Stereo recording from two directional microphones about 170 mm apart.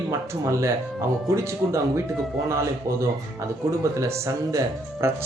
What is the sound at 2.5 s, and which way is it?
Speech, 15° right (ahead or behind).